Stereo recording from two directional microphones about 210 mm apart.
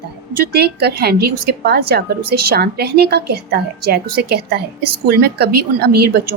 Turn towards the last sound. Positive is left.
turn(degrees=-50)  # may be behind; listen again after turning